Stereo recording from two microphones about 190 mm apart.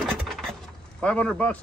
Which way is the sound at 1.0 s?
5° left (ahead or behind).